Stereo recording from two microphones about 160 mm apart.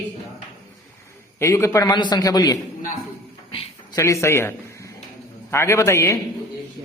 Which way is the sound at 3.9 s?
20° left (ahead or behind).